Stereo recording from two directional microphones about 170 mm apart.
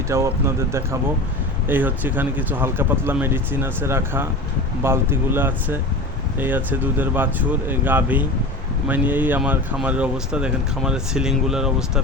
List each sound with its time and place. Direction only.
0.1 s speech: 15° right (ahead or behind)